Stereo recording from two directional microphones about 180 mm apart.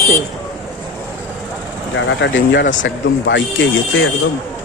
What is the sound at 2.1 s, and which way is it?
Speech, 85° left.